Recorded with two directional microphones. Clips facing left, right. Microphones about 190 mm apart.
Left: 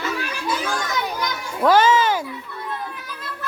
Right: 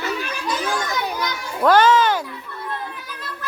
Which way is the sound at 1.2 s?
5° left (ahead or behind).